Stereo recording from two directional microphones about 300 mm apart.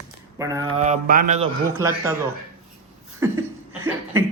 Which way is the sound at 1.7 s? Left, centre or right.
Centre.